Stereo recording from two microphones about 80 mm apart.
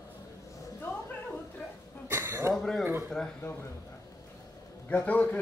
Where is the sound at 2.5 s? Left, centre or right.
Centre.